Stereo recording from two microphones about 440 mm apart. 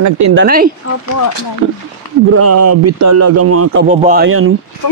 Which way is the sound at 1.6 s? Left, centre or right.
Right.